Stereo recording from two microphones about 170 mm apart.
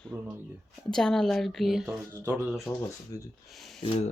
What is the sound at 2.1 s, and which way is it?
Speech, 15° right (ahead or behind).